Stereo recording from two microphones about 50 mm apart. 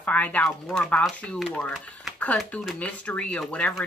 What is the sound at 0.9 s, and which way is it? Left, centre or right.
Speech, left.